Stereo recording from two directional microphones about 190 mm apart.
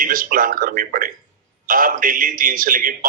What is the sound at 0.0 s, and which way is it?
A man's voice, 45° right (ahead or behind).